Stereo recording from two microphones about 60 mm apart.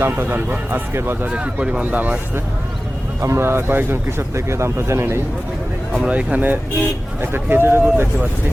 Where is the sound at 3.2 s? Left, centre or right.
Right.